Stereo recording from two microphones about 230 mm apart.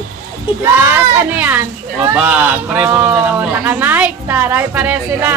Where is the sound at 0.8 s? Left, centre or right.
Centre.